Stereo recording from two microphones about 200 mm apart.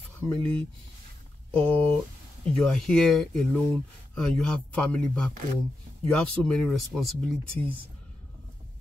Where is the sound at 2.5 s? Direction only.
5° left (ahead or behind).